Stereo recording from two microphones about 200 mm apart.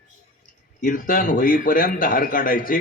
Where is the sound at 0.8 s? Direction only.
45° left (ahead or behind).